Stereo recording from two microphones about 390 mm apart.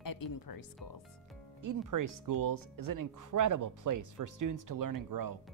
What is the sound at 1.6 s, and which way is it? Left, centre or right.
Speech, right.